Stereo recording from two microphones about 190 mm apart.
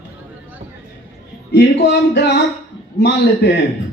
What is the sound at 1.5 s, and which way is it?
Speech, 65° left (ahead or behind).